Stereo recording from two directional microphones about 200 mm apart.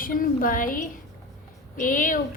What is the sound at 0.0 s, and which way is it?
A woman's voice, 45° left (ahead or behind).